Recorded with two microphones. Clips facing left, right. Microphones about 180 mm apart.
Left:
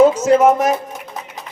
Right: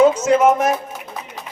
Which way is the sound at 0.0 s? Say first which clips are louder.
Left 2 dB; 35° left (ahead or behind).